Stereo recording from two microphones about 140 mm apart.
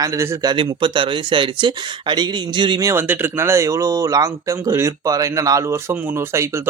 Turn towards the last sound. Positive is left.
turn(degrees=-20)  # may be behind; listen again after turning